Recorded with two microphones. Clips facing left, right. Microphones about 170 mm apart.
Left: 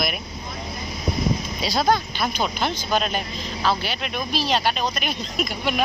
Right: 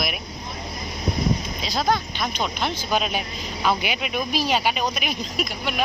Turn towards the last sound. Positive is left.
turn(degrees=0)  # may be behind; listen again after turning